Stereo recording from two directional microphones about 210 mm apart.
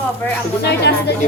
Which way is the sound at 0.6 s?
50° left (ahead or behind).